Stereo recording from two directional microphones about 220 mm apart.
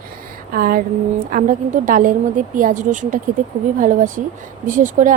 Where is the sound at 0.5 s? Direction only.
40° right (ahead or behind).